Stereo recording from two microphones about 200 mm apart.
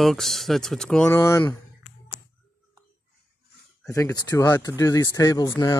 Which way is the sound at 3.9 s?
15° left (ahead or behind).